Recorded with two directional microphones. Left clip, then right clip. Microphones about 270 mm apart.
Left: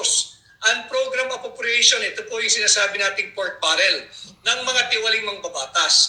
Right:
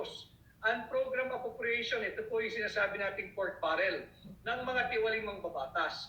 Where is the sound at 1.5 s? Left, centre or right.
Left.